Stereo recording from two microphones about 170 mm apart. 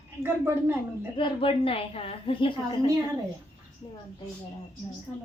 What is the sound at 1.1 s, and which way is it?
A woman's voice, 30° left (ahead or behind).